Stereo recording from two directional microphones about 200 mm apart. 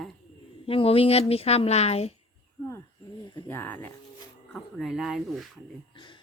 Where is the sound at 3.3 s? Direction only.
15° left (ahead or behind).